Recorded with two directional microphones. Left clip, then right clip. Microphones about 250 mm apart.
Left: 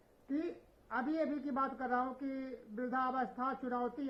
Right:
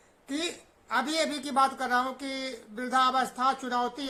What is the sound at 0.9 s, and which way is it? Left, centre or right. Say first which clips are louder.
Speech: right 8 dB; right.